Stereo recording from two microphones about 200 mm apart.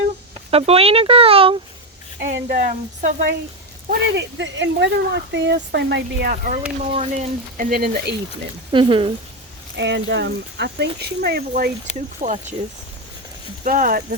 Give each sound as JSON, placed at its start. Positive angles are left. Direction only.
{"t": 0.5, "sound": "speech", "side_deg": -30}
{"t": 2.2, "sound": "speech", "side_deg": -45}
{"t": 4.1, "sound": "speech", "side_deg": -65}
{"t": 8.7, "sound": "speech", "side_deg": -25}
{"t": 9.7, "sound": "speech", "side_deg": -60}
{"t": 11.9, "sound": "speech", "side_deg": 35}
{"t": 12.2, "sound": "speech", "side_deg": -35}
{"t": 13.7, "sound": "speech", "side_deg": -45}